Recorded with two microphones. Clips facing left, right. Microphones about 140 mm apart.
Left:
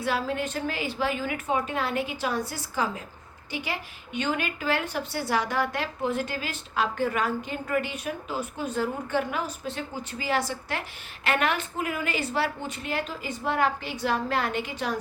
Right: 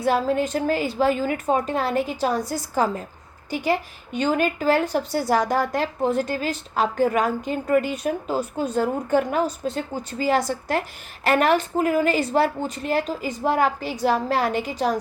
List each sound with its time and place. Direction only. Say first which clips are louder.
0.0 s a woman's voice: right 7 dB; 40° right (ahead or behind)